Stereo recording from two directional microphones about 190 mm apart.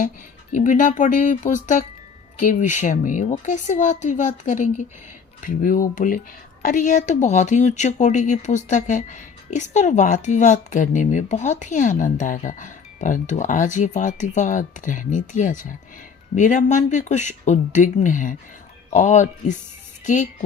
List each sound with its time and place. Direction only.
0.5 s speech: 40° left (ahead or behind)